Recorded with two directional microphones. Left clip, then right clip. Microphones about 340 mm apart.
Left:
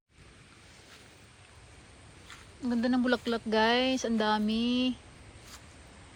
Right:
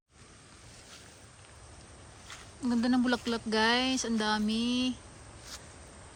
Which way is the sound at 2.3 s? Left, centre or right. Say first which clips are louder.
Right 1 dB; centre.